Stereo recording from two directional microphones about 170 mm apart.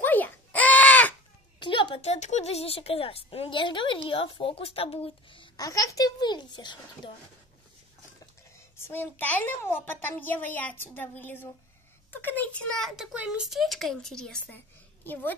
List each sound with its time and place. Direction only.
0.0 s baby cry: 10° left (ahead or behind)
1.6 s a sound: 25° left (ahead or behind)
2.1 s a woman's voice: 40° left (ahead or behind); by 6.8 s 25° left (ahead or behind)
8.7 s a child's voice: 15° left (ahead or behind)